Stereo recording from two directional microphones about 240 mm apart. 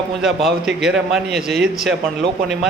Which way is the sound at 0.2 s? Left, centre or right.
Centre.